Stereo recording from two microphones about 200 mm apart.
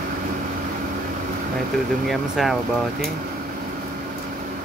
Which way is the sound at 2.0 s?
Centre (ahead or behind).